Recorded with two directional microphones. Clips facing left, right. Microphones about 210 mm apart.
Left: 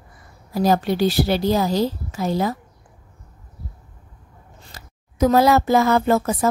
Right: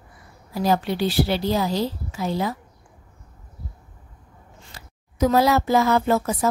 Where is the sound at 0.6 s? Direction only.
40° left (ahead or behind).